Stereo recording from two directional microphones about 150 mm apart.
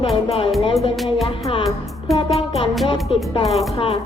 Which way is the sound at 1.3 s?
40° left (ahead or behind).